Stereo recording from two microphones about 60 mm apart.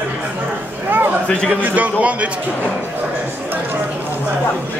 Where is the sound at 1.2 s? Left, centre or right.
Centre.